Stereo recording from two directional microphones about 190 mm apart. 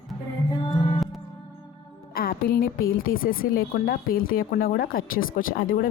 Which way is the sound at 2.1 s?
50° left (ahead or behind).